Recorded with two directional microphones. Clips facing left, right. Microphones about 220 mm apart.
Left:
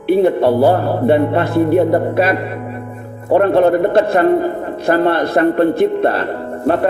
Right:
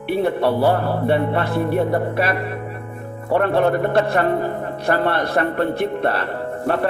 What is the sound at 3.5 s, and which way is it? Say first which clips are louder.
Speech: left 5 dB; 25° left (ahead or behind).